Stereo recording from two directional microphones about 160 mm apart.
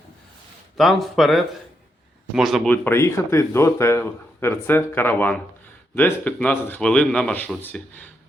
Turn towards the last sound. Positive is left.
turn(degrees=10)  # may be behind; listen again after turning